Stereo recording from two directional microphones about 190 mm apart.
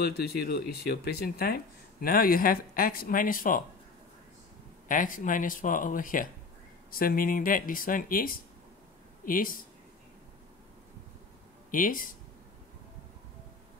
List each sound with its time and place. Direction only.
0.0 s speech: 55° left (ahead or behind)
4.8 s speech: 45° left (ahead or behind)
11.7 s speech: 45° left (ahead or behind)